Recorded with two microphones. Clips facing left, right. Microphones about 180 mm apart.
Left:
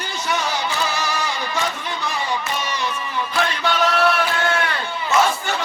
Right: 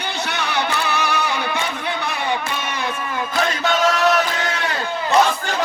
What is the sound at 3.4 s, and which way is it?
Chant, 45° right (ahead or behind).